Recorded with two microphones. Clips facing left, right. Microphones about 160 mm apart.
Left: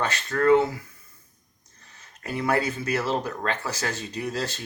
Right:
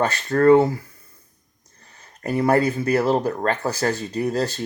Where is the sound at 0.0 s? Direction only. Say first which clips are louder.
Right 6 dB; 40° right (ahead or behind).